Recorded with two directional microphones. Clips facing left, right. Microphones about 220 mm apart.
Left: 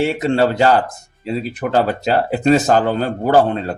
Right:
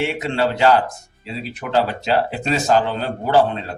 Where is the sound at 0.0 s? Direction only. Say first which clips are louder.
Left 5 dB; 40° left (ahead or behind).